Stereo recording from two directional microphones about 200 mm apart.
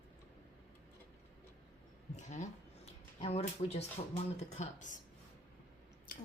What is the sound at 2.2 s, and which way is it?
Speech, 35° left (ahead or behind).